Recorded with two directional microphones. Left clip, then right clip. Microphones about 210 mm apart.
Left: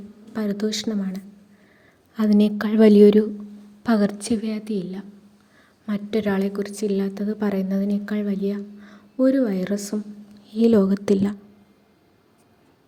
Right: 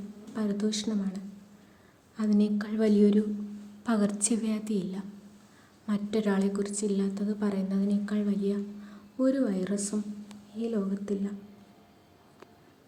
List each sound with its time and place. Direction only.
0.3 s speech: 30° left (ahead or behind)
3.8 s a woman's voice: 25° left (ahead or behind); by 11.3 s 45° left (ahead or behind)